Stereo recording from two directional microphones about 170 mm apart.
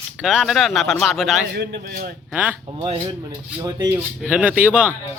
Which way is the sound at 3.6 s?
15° right (ahead or behind).